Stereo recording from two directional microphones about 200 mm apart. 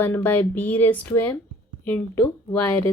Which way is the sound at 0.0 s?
10° left (ahead or behind).